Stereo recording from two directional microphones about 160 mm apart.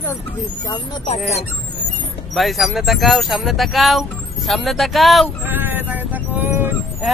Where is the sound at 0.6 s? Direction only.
25° left (ahead or behind).